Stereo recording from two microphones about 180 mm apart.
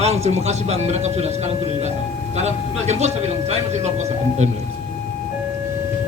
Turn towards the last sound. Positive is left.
turn(degrees=-40)  # may be behind; listen again after turning